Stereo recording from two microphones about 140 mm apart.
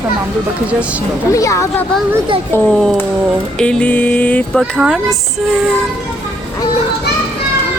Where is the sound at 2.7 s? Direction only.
5° left (ahead or behind).